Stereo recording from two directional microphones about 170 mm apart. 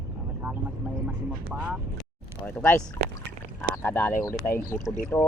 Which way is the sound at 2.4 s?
10° left (ahead or behind).